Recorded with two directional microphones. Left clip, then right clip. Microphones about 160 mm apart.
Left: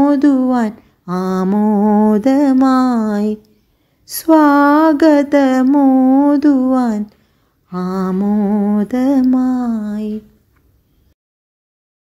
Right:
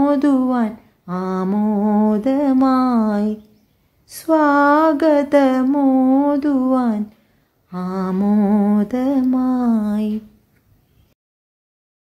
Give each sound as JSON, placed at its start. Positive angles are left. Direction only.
{"t": 0.0, "sound": "mantra", "side_deg": 10}
{"t": 8.3, "sound": "humming", "side_deg": 0}
{"t": 8.8, "sound": "mantra", "side_deg": 15}
{"t": 9.6, "sound": "humming", "side_deg": -5}